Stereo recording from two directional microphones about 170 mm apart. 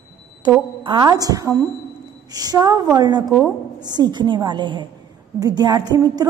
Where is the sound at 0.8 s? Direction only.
25° right (ahead or behind).